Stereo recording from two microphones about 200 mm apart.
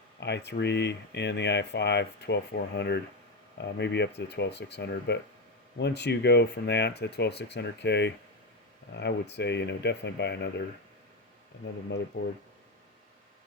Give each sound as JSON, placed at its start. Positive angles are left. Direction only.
{"t": 0.2, "sound": "speech", "side_deg": 60}
{"t": 12.1, "sound": "speech", "side_deg": 60}